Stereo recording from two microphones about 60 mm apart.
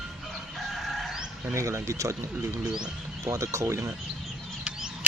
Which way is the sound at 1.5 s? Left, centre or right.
Right.